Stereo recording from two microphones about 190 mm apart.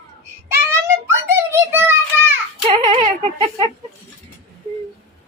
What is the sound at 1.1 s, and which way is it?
Speech, 15° right (ahead or behind).